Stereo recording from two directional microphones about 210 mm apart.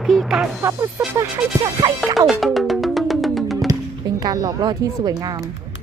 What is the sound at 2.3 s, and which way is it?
Music, centre (ahead or behind).